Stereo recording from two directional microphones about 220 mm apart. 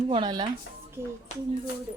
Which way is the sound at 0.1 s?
20° right (ahead or behind).